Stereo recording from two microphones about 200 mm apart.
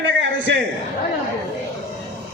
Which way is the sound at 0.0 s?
65° right (ahead or behind).